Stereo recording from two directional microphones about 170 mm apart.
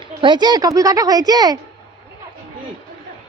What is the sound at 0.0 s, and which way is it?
Speech, 30° right (ahead or behind).